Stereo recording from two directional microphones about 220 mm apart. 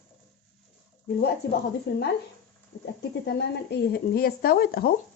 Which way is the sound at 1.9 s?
50° left (ahead or behind).